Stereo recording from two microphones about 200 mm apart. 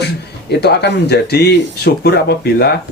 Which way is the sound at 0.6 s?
55° left (ahead or behind).